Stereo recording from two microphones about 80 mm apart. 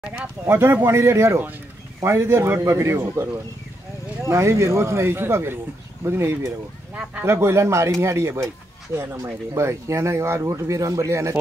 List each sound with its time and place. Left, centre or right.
0.5 s speech: right
4.2 s speech: right